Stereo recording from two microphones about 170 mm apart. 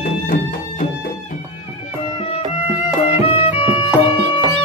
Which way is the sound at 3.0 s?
35° left (ahead or behind).